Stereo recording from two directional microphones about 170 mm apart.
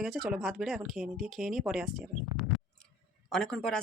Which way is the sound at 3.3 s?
5° left (ahead or behind).